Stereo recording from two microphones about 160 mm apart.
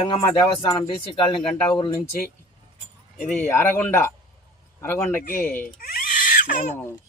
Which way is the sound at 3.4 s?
15° left (ahead or behind).